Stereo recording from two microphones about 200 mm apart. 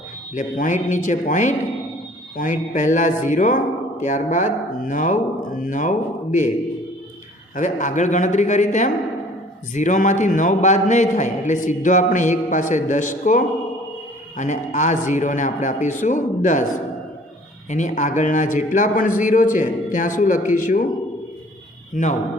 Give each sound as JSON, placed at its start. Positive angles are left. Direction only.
{"t": 0.3, "sound": "a man's voice", "side_deg": 40}
{"t": 7.5, "sound": "a man's voice", "side_deg": 40}
{"t": 21.9, "sound": "a man's voice", "side_deg": 35}